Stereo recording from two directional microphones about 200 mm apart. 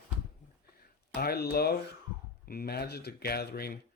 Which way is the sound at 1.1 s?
50° left (ahead or behind).